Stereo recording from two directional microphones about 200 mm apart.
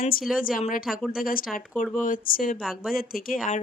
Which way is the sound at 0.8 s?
Centre (ahead or behind).